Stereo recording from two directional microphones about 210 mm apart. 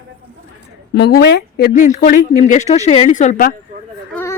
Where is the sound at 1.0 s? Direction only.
50° left (ahead or behind).